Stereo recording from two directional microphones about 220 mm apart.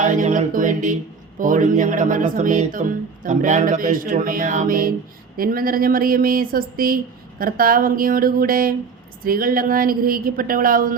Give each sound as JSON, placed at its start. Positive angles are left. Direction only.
{"t": 0.0, "sound": "speech", "side_deg": -35}